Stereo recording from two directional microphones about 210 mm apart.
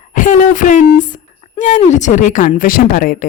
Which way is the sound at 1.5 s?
35° left (ahead or behind).